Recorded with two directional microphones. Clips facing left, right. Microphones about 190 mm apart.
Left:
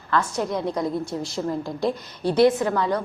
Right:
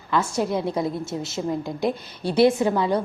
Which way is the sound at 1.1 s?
25° right (ahead or behind).